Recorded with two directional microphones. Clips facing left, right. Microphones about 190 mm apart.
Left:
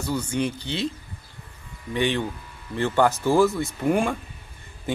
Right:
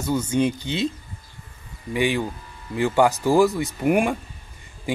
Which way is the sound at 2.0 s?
10° right (ahead or behind).